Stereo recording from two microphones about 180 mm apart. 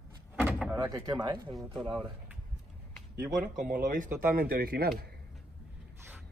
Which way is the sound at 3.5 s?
45° right (ahead or behind).